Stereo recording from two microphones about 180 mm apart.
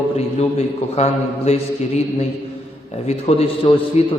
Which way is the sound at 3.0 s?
35° left (ahead or behind).